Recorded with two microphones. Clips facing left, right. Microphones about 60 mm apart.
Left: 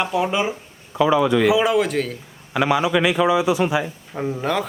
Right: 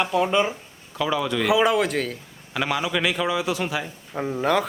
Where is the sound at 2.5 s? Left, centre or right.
Centre.